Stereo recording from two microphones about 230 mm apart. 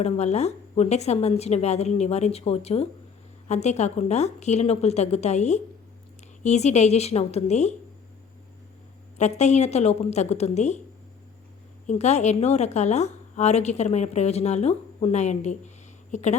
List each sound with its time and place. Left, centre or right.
0.0 s a woman's voice: left
9.1 s a woman's voice: left
11.9 s a woman's voice: left